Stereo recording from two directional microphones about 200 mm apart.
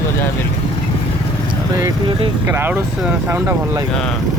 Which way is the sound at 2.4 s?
10° right (ahead or behind).